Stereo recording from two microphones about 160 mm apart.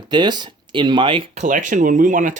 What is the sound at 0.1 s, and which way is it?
Speech, 25° right (ahead or behind).